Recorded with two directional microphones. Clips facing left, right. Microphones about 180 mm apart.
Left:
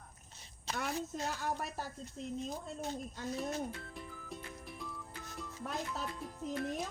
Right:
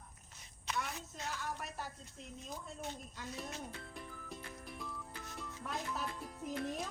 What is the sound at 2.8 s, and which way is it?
Speech, 40° left (ahead or behind).